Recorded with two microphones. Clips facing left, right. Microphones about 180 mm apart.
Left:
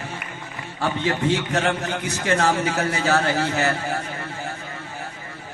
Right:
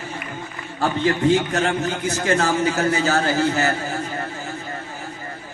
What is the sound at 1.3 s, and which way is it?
A man's voice, 65° left (ahead or behind).